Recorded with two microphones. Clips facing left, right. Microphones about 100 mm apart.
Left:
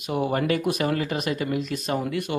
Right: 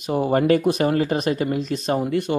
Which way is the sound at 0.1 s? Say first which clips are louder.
Right 6 dB; 35° right (ahead or behind).